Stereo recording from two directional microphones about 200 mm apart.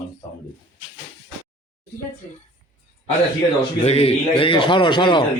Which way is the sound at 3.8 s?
30° left (ahead or behind).